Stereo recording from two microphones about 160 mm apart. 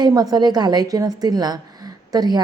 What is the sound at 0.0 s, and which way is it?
Speech, 25° right (ahead or behind).